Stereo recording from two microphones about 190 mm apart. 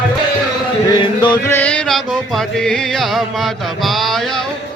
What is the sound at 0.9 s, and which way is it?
Music, 25° left (ahead or behind).